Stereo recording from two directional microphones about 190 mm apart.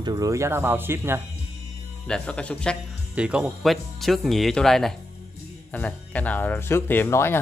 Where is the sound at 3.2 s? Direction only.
5° right (ahead or behind).